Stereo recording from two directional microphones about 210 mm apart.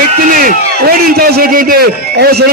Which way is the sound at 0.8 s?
45° right (ahead or behind).